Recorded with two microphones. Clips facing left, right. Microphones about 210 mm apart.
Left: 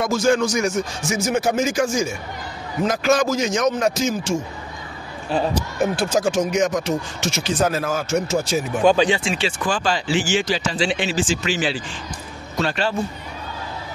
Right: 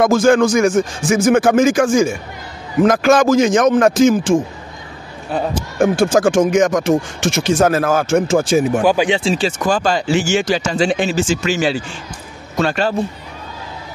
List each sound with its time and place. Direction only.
0.0 s speech: 50° right (ahead or behind)
5.8 s speech: 50° right (ahead or behind)
8.8 s speech: 10° right (ahead or behind)
9.2 s speech: 40° right (ahead or behind)